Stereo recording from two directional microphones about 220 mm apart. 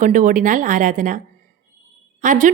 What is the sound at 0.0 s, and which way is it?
A woman's voice, 35° right (ahead or behind).